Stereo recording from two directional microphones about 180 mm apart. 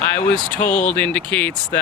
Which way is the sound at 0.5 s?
5° left (ahead or behind).